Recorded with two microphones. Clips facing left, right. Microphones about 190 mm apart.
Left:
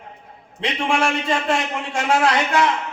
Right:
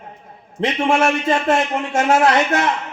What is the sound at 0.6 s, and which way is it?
Speech, 45° right (ahead or behind).